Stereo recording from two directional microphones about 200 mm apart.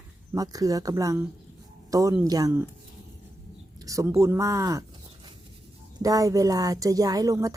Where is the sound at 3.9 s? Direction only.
15° right (ahead or behind).